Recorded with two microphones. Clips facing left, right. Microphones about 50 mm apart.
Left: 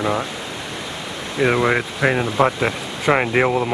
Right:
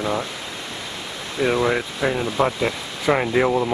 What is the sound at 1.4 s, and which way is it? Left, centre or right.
Speech, left.